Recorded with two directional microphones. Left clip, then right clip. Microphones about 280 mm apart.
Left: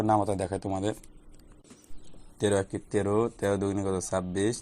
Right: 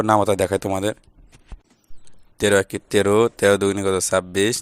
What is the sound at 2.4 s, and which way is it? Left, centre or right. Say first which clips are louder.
Speech: right 9 dB; right.